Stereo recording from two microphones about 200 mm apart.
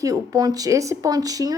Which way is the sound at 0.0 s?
20° right (ahead or behind).